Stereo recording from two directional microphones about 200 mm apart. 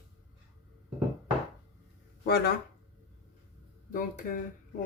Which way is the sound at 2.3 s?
50° left (ahead or behind).